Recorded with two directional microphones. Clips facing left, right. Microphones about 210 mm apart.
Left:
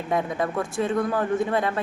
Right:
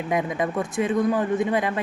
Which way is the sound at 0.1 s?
15° right (ahead or behind).